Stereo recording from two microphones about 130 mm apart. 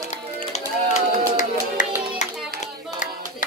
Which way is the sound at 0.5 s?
70° left (ahead or behind).